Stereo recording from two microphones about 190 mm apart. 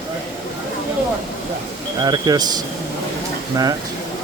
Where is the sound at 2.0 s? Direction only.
20° right (ahead or behind).